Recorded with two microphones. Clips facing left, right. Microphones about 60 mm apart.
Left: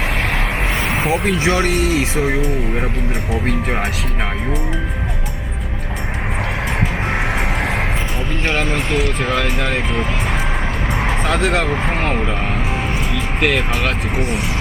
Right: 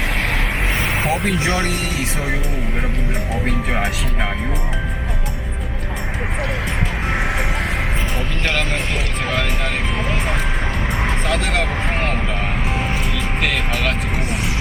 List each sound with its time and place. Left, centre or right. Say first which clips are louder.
1.2 s speech: left 3 dB; centre
1.6 s speech: left 6 dB; left
11.3 s speech: left 4 dB; left
13.4 s speech: left 4 dB; left